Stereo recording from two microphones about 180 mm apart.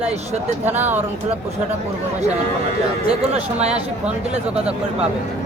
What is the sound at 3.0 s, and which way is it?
Speech, 35° right (ahead or behind).